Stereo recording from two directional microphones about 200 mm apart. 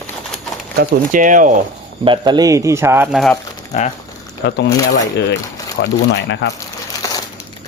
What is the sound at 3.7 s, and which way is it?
Speech, 35° left (ahead or behind).